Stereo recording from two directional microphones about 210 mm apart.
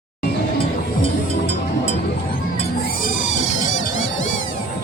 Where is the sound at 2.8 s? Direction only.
40° left (ahead or behind).